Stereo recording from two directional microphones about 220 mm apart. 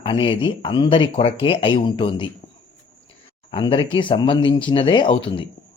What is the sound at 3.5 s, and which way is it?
Speech, 20° left (ahead or behind).